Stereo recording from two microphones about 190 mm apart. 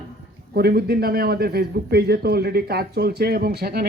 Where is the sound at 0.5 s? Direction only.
55° right (ahead or behind).